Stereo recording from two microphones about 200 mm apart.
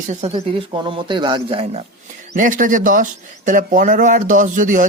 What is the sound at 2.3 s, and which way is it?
Speech, 40° right (ahead or behind).